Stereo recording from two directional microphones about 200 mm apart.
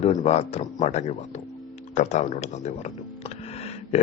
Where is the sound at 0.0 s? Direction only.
35° left (ahead or behind).